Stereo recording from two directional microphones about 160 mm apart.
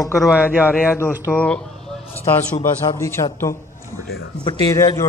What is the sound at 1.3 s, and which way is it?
A man's voice, 10° left (ahead or behind).